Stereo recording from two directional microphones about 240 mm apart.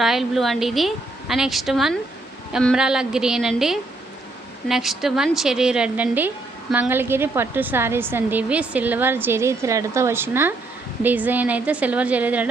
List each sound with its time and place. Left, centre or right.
0.0 s a woman's voice: centre